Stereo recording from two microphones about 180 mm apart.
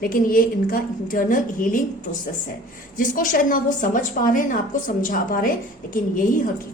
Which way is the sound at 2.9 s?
50° left (ahead or behind).